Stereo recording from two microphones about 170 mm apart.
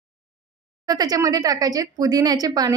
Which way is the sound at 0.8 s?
20° right (ahead or behind).